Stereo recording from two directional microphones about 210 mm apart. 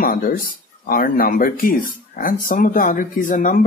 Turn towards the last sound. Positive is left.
turn(degrees=40)  # may be behind; listen again after turning